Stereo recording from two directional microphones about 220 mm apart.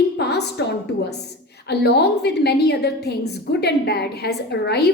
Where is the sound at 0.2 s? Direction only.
50° left (ahead or behind).